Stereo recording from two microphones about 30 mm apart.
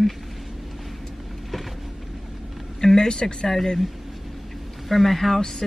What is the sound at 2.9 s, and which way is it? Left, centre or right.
Speech, left.